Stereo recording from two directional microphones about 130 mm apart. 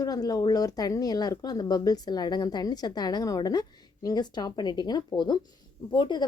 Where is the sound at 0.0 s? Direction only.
30° left (ahead or behind).